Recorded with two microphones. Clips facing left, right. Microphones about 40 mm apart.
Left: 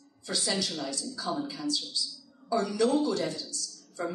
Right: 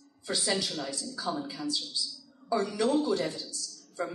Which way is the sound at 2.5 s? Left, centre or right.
Centre.